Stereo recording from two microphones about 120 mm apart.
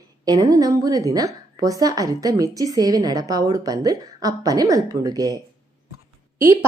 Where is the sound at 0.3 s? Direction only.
30° right (ahead or behind).